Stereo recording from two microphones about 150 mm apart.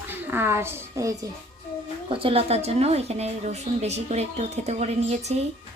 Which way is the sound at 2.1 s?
35° right (ahead or behind).